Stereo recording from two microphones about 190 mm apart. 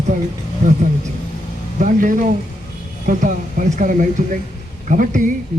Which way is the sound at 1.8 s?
45° right (ahead or behind).